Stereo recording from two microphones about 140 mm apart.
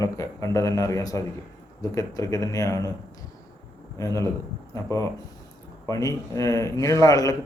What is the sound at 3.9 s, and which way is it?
Speech, 20° left (ahead or behind).